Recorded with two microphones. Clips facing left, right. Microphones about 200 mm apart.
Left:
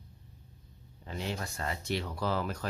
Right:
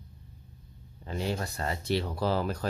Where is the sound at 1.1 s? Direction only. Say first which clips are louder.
Right 5 dB; 40° right (ahead or behind).